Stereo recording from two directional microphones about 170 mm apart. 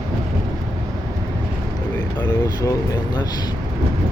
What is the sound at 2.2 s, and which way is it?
Vehicle, 20° left (ahead or behind).